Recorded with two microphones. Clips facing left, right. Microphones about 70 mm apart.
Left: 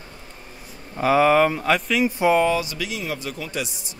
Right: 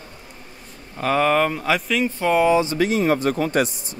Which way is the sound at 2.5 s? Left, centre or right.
Right.